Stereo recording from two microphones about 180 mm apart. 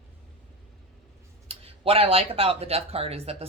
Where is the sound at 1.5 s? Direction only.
30° right (ahead or behind).